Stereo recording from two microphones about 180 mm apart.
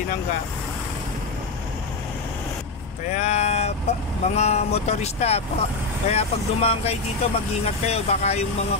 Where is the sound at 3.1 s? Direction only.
40° left (ahead or behind).